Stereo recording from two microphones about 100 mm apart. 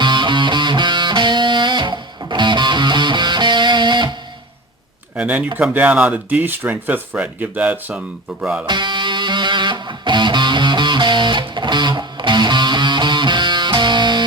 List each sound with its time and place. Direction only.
0.0 s music: 50° right (ahead or behind)
5.1 s speech: 15° right (ahead or behind)
8.6 s music: 50° right (ahead or behind)